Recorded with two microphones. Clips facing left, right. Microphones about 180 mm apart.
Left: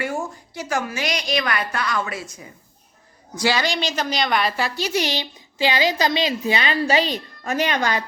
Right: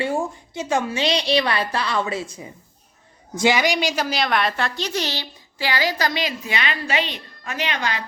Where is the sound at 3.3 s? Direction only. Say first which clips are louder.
Right 3 dB; 20° right (ahead or behind); by 8.0 s 45° left (ahead or behind).